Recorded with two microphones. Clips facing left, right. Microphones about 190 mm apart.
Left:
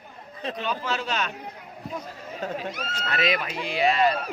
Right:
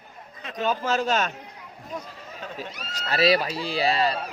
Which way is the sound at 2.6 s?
35° right (ahead or behind).